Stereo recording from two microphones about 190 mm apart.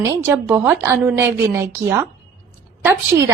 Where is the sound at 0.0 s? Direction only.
15° right (ahead or behind).